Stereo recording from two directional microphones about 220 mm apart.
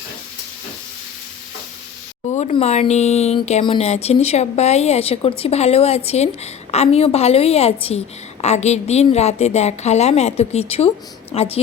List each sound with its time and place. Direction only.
2.3 s speech: 30° left (ahead or behind)